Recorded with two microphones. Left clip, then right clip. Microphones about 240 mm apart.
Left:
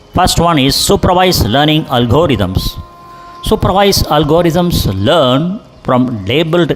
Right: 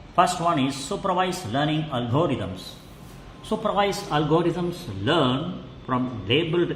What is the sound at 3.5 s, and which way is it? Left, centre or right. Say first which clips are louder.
A man's voice: left 13 dB; left.